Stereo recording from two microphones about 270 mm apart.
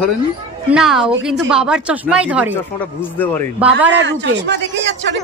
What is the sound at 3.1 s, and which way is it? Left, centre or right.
Speech, centre.